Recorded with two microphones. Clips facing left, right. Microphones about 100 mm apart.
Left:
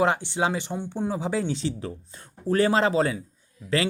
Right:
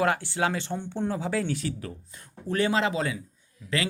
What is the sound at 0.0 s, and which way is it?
Speech, 20° left (ahead or behind).